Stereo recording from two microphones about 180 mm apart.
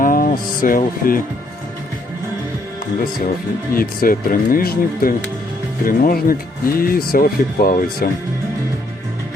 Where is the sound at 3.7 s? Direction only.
55° left (ahead or behind).